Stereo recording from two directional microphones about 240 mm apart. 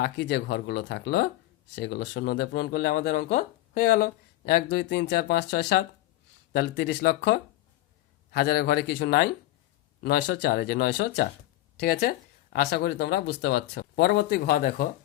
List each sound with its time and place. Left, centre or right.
0.0 s speech: left